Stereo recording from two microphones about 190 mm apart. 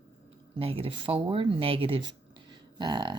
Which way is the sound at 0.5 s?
30° right (ahead or behind).